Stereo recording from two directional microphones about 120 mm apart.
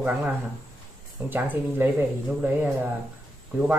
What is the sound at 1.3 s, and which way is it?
Speech, 15° right (ahead or behind).